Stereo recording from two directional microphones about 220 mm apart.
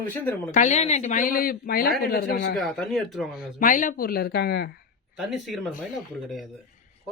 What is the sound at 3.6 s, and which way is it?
Speech, 35° left (ahead or behind).